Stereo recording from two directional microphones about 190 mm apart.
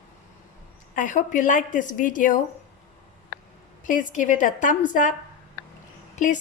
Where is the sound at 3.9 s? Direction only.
40° left (ahead or behind).